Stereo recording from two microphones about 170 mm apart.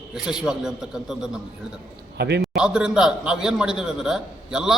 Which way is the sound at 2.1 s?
80° right.